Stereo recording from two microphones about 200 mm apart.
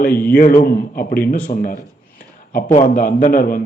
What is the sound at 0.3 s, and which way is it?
Speech, 45° left (ahead or behind).